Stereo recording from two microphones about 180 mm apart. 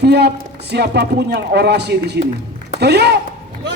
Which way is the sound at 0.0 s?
65° right (ahead or behind).